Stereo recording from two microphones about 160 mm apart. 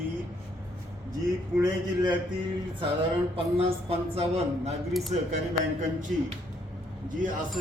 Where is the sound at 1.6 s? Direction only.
20° right (ahead or behind).